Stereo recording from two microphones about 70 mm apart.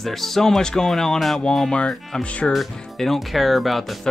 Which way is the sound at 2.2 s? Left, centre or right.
Centre.